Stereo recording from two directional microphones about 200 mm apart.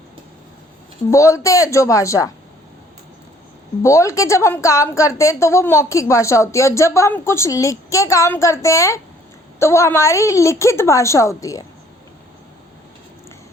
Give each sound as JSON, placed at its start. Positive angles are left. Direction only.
{"t": 1.1, "sound": "a woman's voice", "side_deg": 15}
{"t": 3.8, "sound": "a woman's voice", "side_deg": 15}